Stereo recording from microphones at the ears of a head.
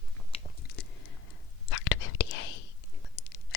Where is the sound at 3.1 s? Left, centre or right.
Left.